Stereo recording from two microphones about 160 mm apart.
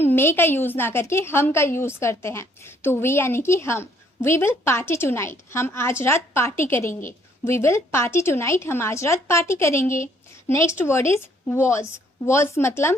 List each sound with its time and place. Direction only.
0.0 s a woman's voice: 15° left (ahead or behind)